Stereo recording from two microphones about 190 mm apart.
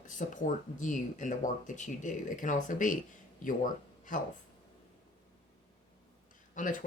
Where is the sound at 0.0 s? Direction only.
40° left (ahead or behind).